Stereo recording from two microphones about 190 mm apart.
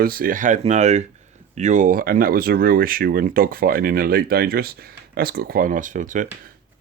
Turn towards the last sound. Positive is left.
turn(degrees=-40)  # may be behind; listen again after turning